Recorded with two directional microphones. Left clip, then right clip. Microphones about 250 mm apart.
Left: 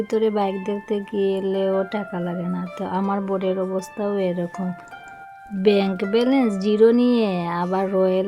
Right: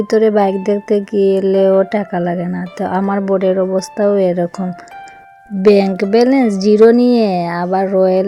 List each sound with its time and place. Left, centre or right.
0.1 s a woman's voice: centre
0.6 s speech: centre
0.9 s speech: right
1.5 s speech: centre
5.6 s a woman's voice: right